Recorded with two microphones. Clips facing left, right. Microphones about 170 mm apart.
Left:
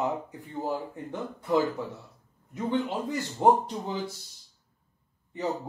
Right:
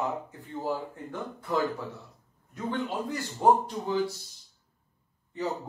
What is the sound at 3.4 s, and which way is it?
Speech, 20° left (ahead or behind).